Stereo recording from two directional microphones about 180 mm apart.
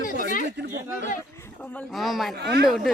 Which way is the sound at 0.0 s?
50° left (ahead or behind).